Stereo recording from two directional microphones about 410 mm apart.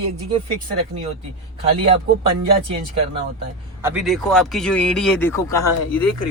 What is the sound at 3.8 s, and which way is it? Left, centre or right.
A man's voice, centre.